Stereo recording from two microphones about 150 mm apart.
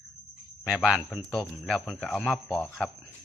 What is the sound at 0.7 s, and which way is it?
Speech, 5° right (ahead or behind).